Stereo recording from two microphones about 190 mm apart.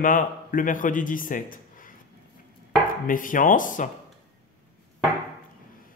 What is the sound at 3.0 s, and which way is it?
Speech, 45° left (ahead or behind).